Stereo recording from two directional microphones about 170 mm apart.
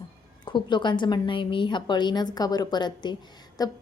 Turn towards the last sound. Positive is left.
turn(degrees=20)  # may be behind; listen again after turning